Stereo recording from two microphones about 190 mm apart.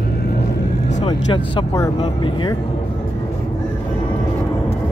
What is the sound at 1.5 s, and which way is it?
Speech, 20° left (ahead or behind).